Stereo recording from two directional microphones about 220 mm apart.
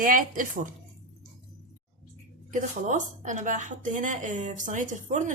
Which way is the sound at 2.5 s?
35° right (ahead or behind).